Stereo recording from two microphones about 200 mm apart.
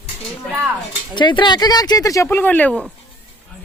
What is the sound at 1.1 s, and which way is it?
Speech, 20° left (ahead or behind).